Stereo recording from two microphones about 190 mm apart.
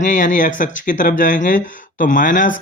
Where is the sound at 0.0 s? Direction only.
40° left (ahead or behind).